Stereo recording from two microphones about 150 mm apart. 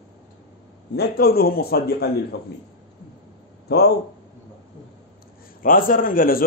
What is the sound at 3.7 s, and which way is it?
Speech, 90° left.